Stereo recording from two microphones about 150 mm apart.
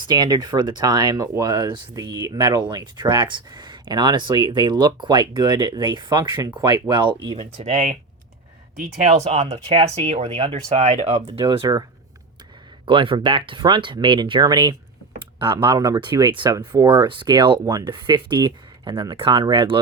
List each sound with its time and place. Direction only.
0.0 s speech: 30° right (ahead or behind); by 7.9 s 55° right (ahead or behind)
9.0 s speech: 45° right (ahead or behind)